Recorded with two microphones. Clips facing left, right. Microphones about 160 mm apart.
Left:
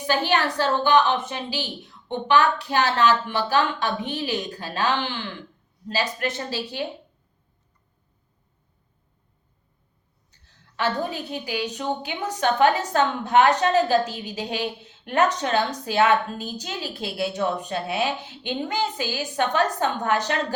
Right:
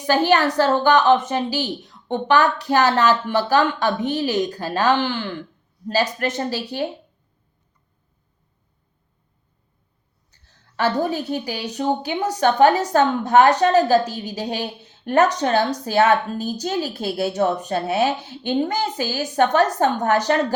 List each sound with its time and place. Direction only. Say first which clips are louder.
0.1 s a woman's voice: right 6 dB; 40° right (ahead or behind)
10.8 s a woman's voice: right 5 dB; 40° right (ahead or behind)